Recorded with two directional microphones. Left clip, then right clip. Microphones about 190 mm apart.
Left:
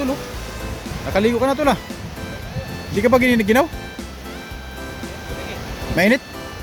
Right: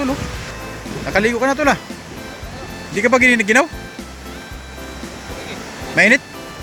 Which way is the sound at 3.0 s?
15° left (ahead or behind).